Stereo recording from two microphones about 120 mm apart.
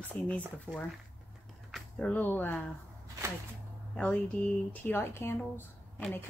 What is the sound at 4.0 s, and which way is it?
Speech, 10° left (ahead or behind).